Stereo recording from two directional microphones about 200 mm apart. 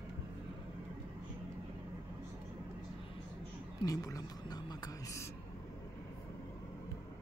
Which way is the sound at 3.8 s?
15° left (ahead or behind).